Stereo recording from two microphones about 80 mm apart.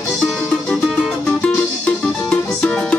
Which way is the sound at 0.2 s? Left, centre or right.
Centre.